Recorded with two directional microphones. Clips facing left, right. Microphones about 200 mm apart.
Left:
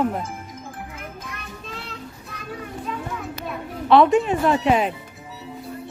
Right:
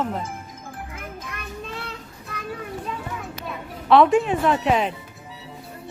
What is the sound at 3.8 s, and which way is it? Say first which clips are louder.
Speech: left 1 dB; centre (ahead or behind).